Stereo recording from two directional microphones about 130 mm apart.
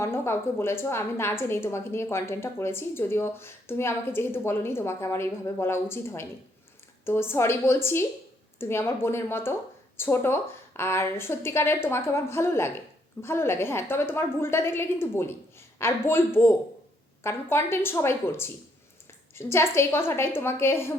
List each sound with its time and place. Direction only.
0.0 s a woman's voice: 20° left (ahead or behind)